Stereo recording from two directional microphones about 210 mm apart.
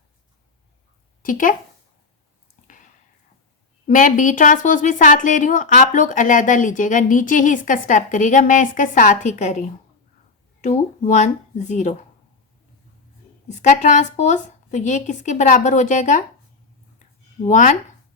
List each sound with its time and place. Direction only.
1.2 s a woman's voice: 40° left (ahead or behind)
3.8 s a woman's voice: 40° left (ahead or behind)
13.5 s a woman's voice: 35° left (ahead or behind)
17.4 s a woman's voice: 35° left (ahead or behind)